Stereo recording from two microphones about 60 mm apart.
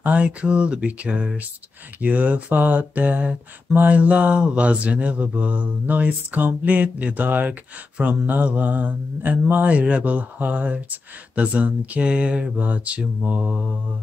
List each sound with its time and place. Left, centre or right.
0.0 s speech: right